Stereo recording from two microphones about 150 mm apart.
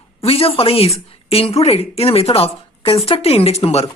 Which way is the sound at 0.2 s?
40° left (ahead or behind).